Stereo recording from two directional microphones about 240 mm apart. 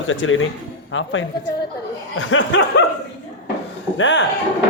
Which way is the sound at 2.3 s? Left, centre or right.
Left.